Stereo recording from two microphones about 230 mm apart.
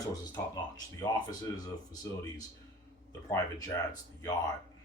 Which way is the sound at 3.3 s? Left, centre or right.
Centre.